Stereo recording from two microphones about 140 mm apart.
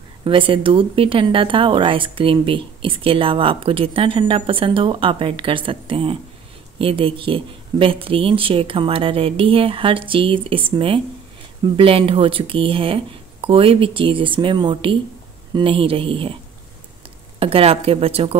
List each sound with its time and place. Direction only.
0.2 s speech: 40° right (ahead or behind)
17.4 s speech: 45° right (ahead or behind)